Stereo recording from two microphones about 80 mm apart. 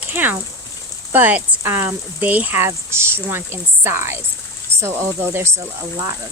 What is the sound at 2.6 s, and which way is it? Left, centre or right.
Speech, right.